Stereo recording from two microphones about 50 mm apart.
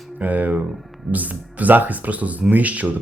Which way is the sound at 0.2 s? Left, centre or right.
Right.